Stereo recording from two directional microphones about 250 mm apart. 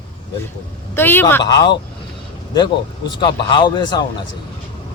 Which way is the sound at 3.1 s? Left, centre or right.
Centre.